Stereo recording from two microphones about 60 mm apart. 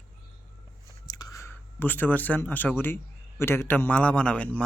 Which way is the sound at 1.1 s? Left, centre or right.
Left.